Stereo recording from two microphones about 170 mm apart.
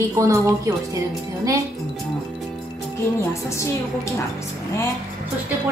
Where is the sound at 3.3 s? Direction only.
15° left (ahead or behind).